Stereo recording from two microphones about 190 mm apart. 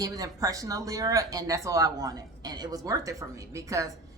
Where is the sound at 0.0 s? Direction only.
20° right (ahead or behind).